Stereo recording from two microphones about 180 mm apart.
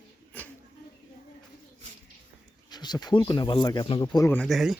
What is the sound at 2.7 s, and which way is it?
Speech, 25° left (ahead or behind).